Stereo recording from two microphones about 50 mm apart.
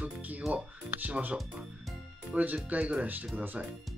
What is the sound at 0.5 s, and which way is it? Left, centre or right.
Speech, right.